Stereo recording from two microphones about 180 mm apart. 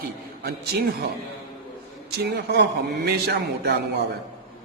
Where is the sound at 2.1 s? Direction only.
65° right (ahead or behind).